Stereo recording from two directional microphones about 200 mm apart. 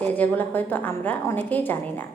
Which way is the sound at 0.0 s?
10° left (ahead or behind).